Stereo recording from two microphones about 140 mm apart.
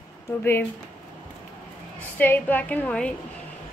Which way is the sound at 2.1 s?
15° left (ahead or behind).